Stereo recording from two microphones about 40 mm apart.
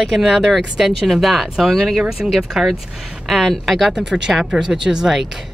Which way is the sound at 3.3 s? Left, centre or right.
Centre.